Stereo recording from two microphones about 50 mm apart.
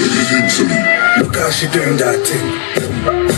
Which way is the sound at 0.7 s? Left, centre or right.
Centre.